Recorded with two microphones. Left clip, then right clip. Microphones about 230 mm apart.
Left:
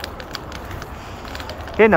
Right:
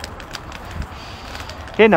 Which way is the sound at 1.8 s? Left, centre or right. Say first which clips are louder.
Right 1 dB; right.